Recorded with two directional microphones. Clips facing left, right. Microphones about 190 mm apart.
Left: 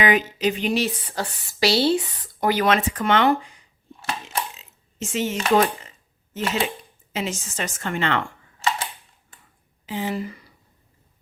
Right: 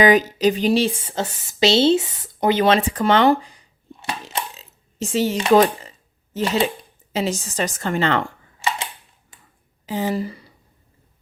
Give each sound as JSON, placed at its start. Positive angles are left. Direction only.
{"t": 0.0, "sound": "speech", "side_deg": -40}
{"t": 4.3, "sound": "coin", "side_deg": -35}
{"t": 5.5, "sound": "a woman's voice", "side_deg": -35}
{"t": 9.8, "sound": "speech", "side_deg": -40}